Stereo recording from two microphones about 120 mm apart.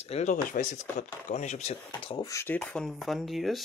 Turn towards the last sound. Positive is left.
turn(degrees=0)  # may be behind; listen again after turning